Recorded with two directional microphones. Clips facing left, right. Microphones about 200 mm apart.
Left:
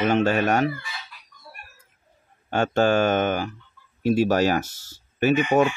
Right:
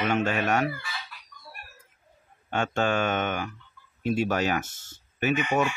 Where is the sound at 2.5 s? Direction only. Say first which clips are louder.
Left 6 dB; 40° left (ahead or behind).